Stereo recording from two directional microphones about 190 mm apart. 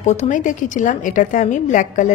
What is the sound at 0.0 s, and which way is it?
Speech, 40° left (ahead or behind).